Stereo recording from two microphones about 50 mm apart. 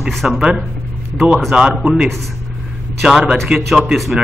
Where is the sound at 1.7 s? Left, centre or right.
Centre.